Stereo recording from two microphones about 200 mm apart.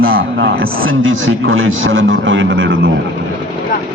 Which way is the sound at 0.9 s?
85° right.